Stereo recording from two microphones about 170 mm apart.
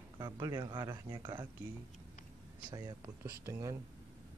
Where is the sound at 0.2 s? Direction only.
20° right (ahead or behind).